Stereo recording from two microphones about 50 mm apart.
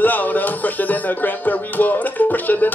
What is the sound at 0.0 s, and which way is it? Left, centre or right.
Music, left.